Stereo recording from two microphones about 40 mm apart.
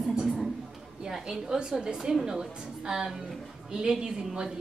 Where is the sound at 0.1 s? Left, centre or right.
Centre.